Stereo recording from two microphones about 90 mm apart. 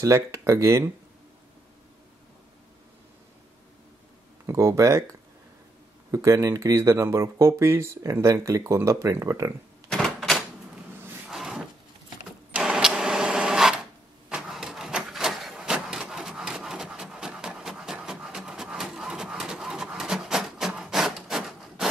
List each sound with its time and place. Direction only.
0.0 s speech: 35° right (ahead or behind)
4.5 s speech: 35° right (ahead or behind)
6.1 s speech: 40° right (ahead or behind)
9.8 s typewriter: 5° left (ahead or behind)
11.2 s a sound: 5° right (ahead or behind)
14.3 s printer: 5° right (ahead or behind)